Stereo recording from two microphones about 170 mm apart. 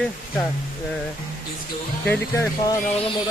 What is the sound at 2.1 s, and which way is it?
Speech, 15° left (ahead or behind).